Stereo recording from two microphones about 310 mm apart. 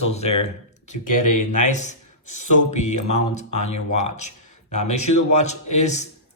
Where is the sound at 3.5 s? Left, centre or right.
Left.